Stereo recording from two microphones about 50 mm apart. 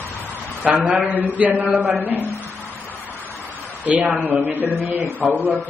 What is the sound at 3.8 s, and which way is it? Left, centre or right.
Speech, right.